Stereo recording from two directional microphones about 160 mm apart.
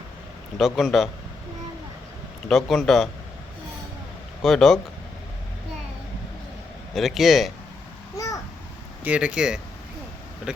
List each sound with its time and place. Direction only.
0.5 s a man's voice: centre (ahead or behind)
2.5 s a man's voice: centre (ahead or behind)
4.4 s a man's voice: centre (ahead or behind)
6.9 s a man's voice: centre (ahead or behind)
8.1 s babbling: 20° left (ahead or behind)
9.0 s speech: 5° right (ahead or behind)